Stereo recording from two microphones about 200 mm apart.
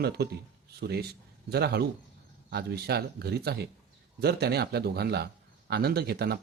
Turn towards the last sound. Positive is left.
turn(degrees=-55)  # may be behind; listen again after turning